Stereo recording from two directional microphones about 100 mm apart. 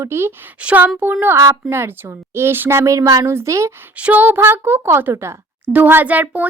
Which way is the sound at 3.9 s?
15° right (ahead or behind).